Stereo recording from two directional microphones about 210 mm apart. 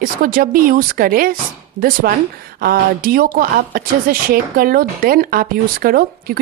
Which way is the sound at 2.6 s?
45° right (ahead or behind).